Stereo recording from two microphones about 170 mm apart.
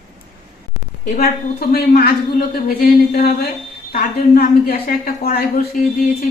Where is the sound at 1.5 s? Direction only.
65° left (ahead or behind).